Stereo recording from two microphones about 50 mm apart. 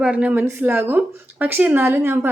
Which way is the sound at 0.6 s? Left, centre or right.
Right.